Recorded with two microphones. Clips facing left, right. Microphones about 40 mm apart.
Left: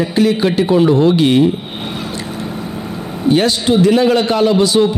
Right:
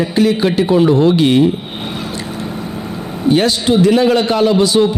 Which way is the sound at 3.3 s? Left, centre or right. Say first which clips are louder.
Even; centre.